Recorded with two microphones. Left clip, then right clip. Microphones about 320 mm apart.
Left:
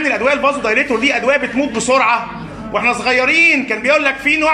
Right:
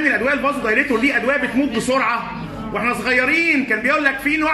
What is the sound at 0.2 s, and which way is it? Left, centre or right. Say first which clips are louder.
A man's voice: left 5 dB; centre.